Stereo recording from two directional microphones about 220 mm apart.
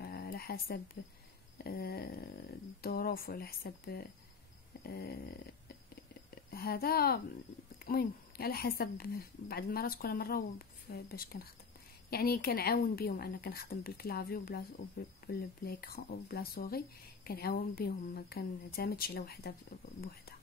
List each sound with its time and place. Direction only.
0.0 s a sound: 45° left (ahead or behind)
1.0 s speech: 55° left (ahead or behind)
1.6 s speech: 45° left (ahead or behind)
6.5 s speech: 45° left (ahead or behind)